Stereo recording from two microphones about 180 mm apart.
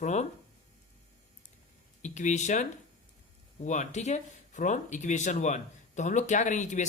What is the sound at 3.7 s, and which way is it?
Speech, 40° left (ahead or behind).